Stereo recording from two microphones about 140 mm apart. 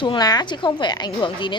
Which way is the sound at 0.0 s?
30° left (ahead or behind).